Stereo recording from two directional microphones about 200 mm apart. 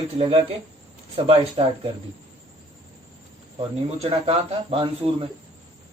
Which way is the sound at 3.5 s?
30° right (ahead or behind).